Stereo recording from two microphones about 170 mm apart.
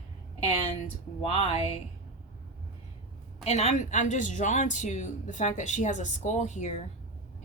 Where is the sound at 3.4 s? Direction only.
40° left (ahead or behind).